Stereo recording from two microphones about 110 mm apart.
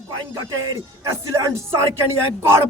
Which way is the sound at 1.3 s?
25° right (ahead or behind).